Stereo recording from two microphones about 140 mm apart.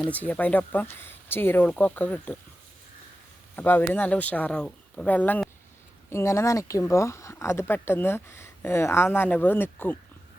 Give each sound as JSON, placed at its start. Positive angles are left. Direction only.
{"t": 0.1, "sound": "speech", "side_deg": 10}
{"t": 3.5, "sound": "speech", "side_deg": 15}